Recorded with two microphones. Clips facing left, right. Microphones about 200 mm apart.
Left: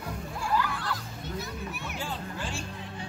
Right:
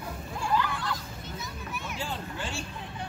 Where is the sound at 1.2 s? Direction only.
60° left (ahead or behind).